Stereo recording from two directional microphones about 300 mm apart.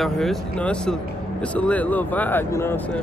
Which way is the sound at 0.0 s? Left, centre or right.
Centre.